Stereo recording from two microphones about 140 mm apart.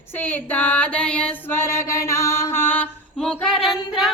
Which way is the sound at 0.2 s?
10° left (ahead or behind).